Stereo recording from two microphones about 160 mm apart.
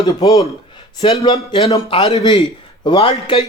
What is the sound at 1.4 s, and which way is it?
A man's voice, 25° left (ahead or behind).